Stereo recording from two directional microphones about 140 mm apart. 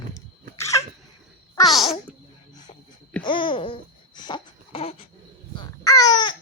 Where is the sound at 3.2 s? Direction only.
35° left (ahead or behind).